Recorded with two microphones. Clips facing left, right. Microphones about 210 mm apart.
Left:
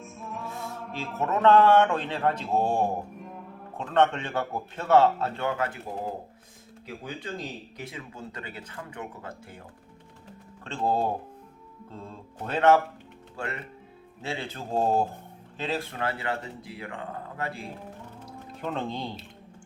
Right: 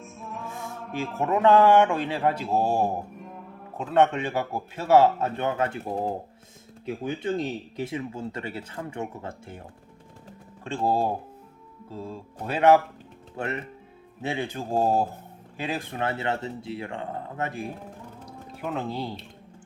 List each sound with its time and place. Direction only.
0.0 s music: centre (ahead or behind)
1.4 s speech: 15° right (ahead or behind)
6.8 s speech: 25° right (ahead or behind)
10.6 s speech: 10° right (ahead or behind)
13.3 s speech: 20° right (ahead or behind)
18.5 s speech: 5° right (ahead or behind)